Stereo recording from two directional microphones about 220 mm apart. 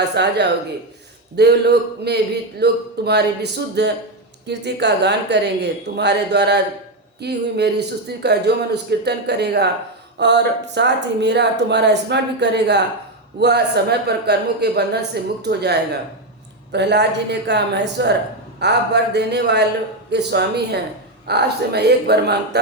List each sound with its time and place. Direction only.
0.2 s speech: 50° right (ahead or behind)
1.4 s speech: 50° right (ahead or behind)